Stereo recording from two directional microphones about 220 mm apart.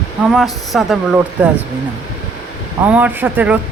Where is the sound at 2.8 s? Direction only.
5° right (ahead or behind).